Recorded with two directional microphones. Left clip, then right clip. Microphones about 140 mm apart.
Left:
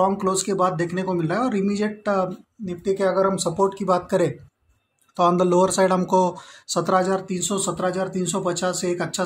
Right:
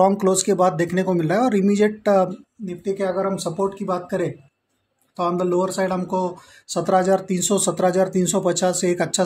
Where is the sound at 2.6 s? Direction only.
Centre (ahead or behind).